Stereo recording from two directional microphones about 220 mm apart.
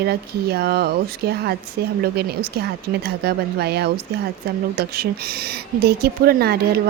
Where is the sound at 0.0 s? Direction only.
45° right (ahead or behind).